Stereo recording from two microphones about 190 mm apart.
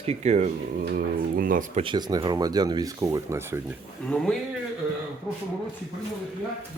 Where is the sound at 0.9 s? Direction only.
50° right (ahead or behind).